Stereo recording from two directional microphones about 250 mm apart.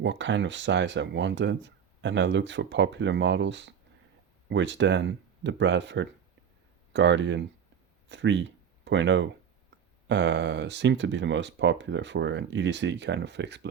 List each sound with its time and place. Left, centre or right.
0.0 s speech: right